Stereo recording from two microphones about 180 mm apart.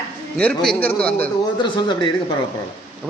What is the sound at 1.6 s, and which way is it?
Speech, 25° left (ahead or behind).